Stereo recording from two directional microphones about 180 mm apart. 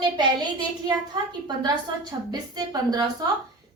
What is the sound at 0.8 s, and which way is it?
A woman's voice, 25° right (ahead or behind).